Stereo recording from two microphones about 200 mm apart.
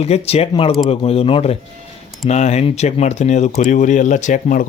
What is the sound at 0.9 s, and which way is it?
Speech, 30° left (ahead or behind).